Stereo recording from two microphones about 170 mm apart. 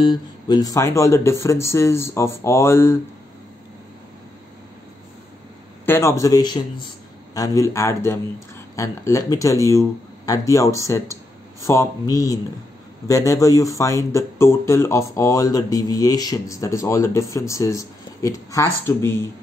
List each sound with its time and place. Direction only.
0.0 s speech: 25° left (ahead or behind)
5.9 s speech: 15° left (ahead or behind)